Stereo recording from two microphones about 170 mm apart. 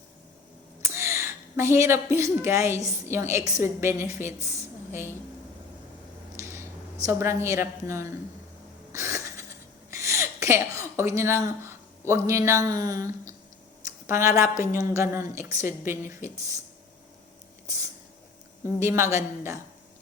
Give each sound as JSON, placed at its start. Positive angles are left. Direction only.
{"t": 0.9, "sound": "a sound", "side_deg": -15}
{"t": 2.1, "sound": "a woman's voice", "side_deg": -15}
{"t": 6.4, "sound": "a woman's voice", "side_deg": -15}
{"t": 8.9, "sound": "a sound", "side_deg": -15}
{"t": 9.9, "sound": "a woman's voice", "side_deg": -15}
{"t": 18.8, "sound": "speech", "side_deg": -15}